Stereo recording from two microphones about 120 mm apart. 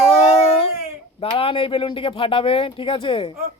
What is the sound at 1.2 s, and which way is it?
Speech, 50° left (ahead or behind).